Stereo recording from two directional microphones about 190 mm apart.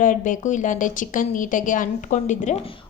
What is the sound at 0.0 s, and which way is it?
A woman's voice, 45° left (ahead or behind).